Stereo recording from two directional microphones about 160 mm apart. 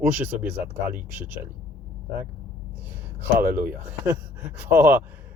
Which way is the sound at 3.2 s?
10° right (ahead or behind).